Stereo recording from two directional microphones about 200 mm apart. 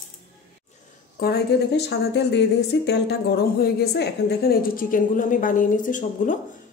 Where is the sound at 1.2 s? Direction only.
55° left (ahead or behind).